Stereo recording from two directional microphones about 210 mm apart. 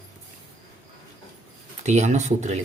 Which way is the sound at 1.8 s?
35° right (ahead or behind).